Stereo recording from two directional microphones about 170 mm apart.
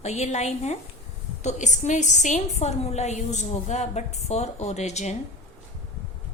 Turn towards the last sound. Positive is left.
turn(degrees=40)  # may be behind; listen again after turning